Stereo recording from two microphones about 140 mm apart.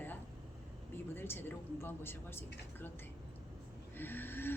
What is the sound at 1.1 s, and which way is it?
A woman's voice, 15° left (ahead or behind).